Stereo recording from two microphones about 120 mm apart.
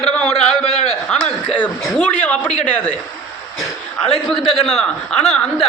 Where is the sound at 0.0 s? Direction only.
5° left (ahead or behind).